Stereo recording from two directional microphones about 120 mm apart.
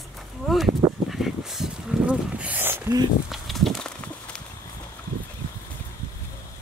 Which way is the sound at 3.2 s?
Centre (ahead or behind).